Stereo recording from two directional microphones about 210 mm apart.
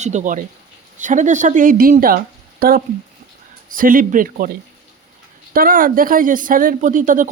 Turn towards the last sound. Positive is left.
turn(degrees=-40)  # may be behind; listen again after turning